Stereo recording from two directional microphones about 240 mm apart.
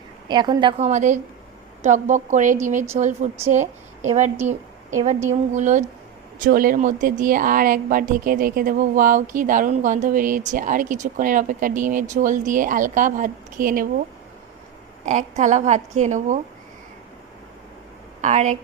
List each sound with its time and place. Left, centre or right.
0.3 s a woman's voice: centre; by 13.8 s right
15.0 s a woman's voice: right
18.2 s speech: right